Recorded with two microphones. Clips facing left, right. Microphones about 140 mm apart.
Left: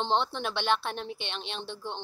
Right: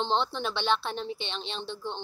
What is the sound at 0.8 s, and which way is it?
Speech, 60° left (ahead or behind).